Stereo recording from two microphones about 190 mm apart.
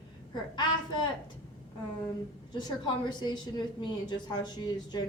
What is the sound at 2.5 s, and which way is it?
A woman's voice, 25° left (ahead or behind).